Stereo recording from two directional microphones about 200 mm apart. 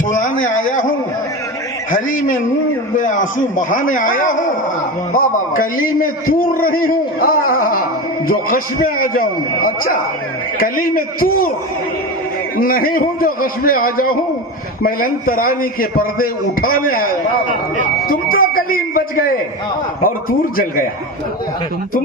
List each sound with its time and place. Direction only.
0.1 s a sound: 40° left (ahead or behind)
0.4 s a man's voice: 40° left (ahead or behind)
1.9 s a man's voice: 40° left (ahead or behind)
12.5 s a man's voice: 45° left (ahead or behind)